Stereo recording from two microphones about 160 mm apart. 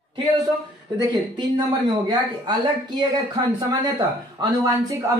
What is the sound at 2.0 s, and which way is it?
Speech, 30° right (ahead or behind).